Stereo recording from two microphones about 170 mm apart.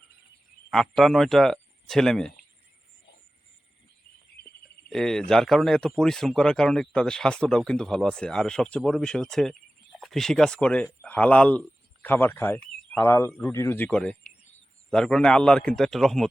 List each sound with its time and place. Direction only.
0.7 s speech: centre (ahead or behind)
4.4 s a sound: 70° left (ahead or behind)
4.9 s speech: 5° left (ahead or behind)